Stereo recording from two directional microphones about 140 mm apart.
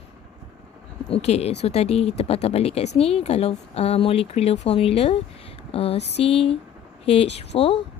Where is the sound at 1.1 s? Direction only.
45° left (ahead or behind).